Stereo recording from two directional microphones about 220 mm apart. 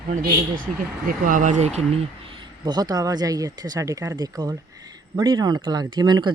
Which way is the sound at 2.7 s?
15° right (ahead or behind).